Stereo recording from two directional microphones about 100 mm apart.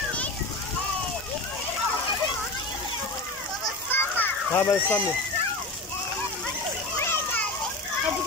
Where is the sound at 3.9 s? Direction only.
20° left (ahead or behind).